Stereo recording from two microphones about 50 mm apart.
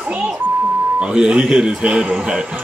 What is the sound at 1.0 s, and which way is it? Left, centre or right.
Speech, centre.